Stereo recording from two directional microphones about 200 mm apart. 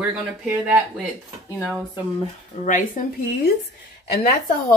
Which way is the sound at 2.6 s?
40° left (ahead or behind).